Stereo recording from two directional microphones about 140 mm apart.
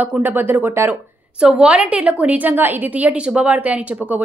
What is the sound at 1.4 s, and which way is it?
A woman's voice, 5° right (ahead or behind).